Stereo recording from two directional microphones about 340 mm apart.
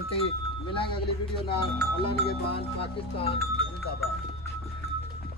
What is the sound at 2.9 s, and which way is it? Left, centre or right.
Speech, centre.